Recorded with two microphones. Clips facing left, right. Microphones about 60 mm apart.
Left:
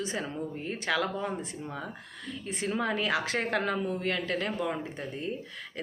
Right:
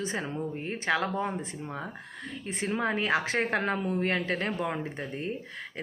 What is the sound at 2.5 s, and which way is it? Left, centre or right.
Speech, right.